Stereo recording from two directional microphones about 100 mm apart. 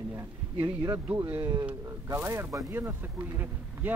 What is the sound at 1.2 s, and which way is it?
Speech, 20° right (ahead or behind).